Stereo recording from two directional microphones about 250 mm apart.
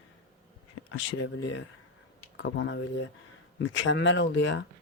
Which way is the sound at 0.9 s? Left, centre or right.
Left.